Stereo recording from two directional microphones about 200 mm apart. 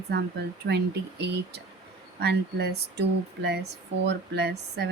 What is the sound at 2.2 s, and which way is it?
A woman's voice, 55° right (ahead or behind).